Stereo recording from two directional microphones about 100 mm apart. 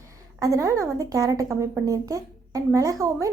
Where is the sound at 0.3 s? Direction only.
35° right (ahead or behind).